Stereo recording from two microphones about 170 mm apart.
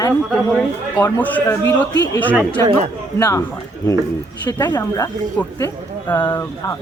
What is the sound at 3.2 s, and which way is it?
Speech, 15° left (ahead or behind).